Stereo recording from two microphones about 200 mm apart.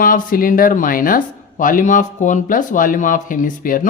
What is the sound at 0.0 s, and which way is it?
Speech, 45° left (ahead or behind).